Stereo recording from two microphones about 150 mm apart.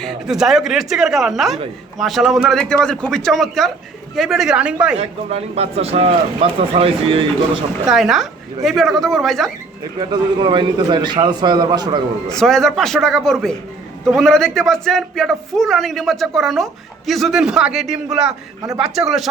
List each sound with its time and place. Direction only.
0.0 s a man's voice: centre (ahead or behind)
4.9 s speech: 45° right (ahead or behind)
7.9 s a man's voice: centre (ahead or behind)
10.0 s a man's voice: 30° right (ahead or behind)
12.3 s a man's voice: 5° left (ahead or behind)